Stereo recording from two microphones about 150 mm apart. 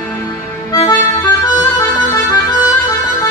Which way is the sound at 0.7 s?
25° left (ahead or behind).